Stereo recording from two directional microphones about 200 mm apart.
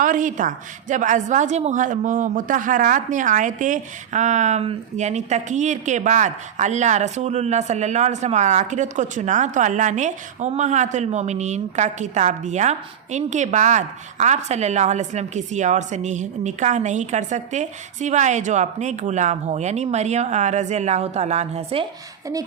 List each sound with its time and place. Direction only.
0.0 s a woman's voice: 40° right (ahead or behind)